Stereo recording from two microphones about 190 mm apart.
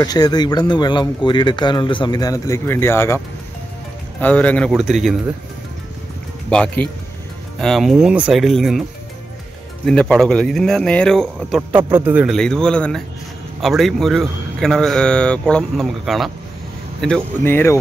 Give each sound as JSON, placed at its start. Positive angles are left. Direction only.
{"t": 0.0, "sound": "speech", "side_deg": 20}
{"t": 4.2, "sound": "speech", "side_deg": 10}
{"t": 6.5, "sound": "speech", "side_deg": 5}
{"t": 9.8, "sound": "speech", "side_deg": 5}
{"t": 12.4, "sound": "speech", "side_deg": 5}